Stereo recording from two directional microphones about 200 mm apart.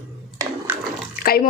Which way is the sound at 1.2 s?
50° left (ahead or behind).